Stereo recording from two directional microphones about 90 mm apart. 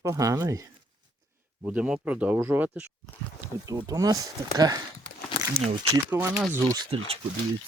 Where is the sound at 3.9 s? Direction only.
40° right (ahead or behind).